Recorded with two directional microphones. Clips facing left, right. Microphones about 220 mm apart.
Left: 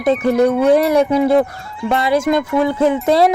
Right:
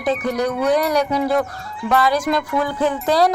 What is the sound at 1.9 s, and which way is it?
Speech, 25° left (ahead or behind).